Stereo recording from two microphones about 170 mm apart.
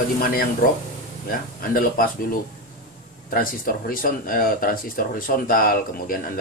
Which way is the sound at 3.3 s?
55° left (ahead or behind).